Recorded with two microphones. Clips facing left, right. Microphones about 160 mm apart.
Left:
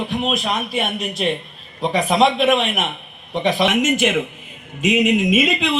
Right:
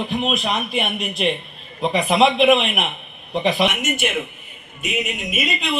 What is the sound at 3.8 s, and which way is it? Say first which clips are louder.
Speech: left 5 dB; 90° left.